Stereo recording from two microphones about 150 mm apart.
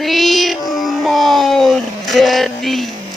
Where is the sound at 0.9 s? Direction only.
Centre (ahead or behind).